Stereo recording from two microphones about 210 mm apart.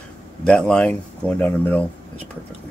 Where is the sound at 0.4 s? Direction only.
5° left (ahead or behind).